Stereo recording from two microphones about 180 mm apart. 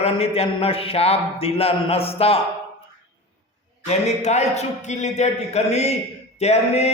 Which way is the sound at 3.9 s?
40° left (ahead or behind).